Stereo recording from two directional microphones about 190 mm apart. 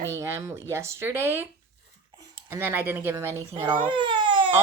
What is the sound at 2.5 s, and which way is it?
Speech, 10° right (ahead or behind).